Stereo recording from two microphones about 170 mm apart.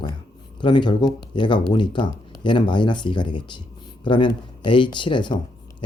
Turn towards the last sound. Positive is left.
turn(degrees=25)  # may be behind; listen again after turning